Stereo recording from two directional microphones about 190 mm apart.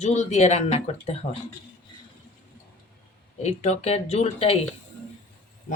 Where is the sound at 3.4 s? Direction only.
35° left (ahead or behind).